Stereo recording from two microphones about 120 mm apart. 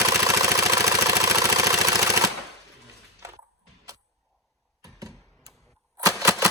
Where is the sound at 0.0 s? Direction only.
30° right (ahead or behind).